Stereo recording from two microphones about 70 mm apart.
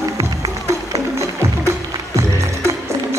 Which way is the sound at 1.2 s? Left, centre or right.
Right.